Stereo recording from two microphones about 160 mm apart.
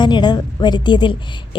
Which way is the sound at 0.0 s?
30° left (ahead or behind).